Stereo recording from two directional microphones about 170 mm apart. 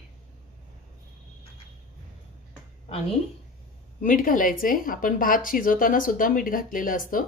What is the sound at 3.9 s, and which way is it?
Speech, 50° left (ahead or behind).